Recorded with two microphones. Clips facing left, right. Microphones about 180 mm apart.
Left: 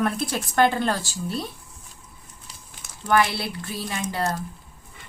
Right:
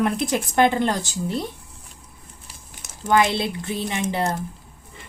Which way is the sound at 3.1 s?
20° right (ahead or behind).